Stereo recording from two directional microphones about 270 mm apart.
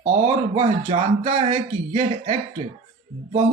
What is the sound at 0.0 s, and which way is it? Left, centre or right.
Speech, right.